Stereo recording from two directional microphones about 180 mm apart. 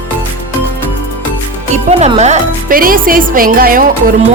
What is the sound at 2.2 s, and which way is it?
Speech, 40° right (ahead or behind).